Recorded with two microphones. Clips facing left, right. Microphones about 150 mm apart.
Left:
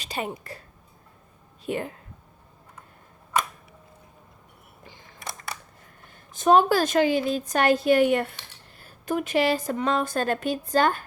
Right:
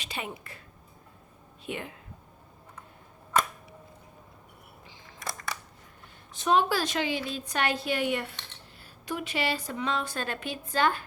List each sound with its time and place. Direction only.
0.0 s a woman's voice: 40° left (ahead or behind)
1.6 s speech: 40° left (ahead or behind)
5.2 s camera: 25° left (ahead or behind)
6.3 s a woman's voice: 45° left (ahead or behind)